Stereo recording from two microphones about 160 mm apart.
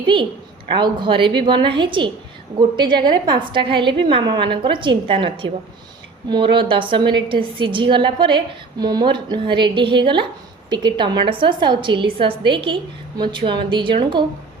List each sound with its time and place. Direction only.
0.7 s a woman's voice: 30° right (ahead or behind)